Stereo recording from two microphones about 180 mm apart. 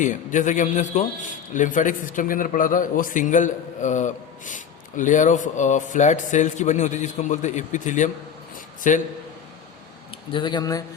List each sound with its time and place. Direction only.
0.0 s a man's voice: 45° left (ahead or behind)
10.3 s speech: 25° left (ahead or behind)